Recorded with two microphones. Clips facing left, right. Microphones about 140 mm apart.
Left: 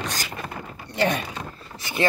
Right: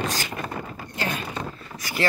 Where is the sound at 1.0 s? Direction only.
70° left (ahead or behind).